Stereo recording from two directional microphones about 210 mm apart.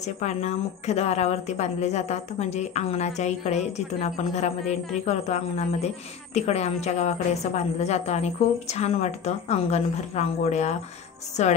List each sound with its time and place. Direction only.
0.0 s a woman's voice: 35° left (ahead or behind)